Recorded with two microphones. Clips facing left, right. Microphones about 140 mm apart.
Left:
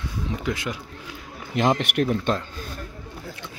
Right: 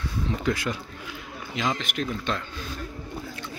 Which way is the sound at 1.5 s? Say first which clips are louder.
Left 7 dB; 55° left (ahead or behind).